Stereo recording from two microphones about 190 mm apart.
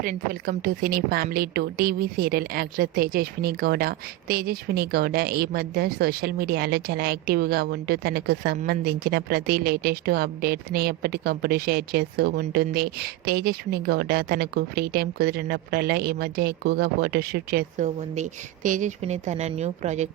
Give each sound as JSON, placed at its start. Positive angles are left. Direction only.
{"t": 0.0, "sound": "a woman's voice", "side_deg": -45}
{"t": 17.8, "sound": "speech", "side_deg": -35}